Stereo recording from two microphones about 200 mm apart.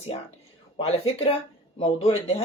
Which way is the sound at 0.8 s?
30° left (ahead or behind).